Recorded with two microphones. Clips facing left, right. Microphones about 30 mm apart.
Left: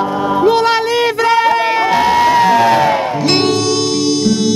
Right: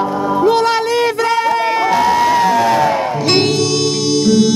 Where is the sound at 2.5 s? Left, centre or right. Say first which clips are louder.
Left 2 dB; left.